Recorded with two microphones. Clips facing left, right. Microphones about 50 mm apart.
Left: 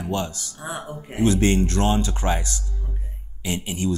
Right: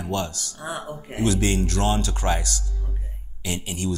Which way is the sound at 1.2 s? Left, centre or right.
Left.